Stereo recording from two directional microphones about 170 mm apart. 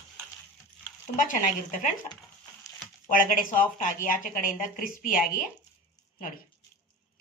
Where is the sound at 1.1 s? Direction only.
50° left (ahead or behind).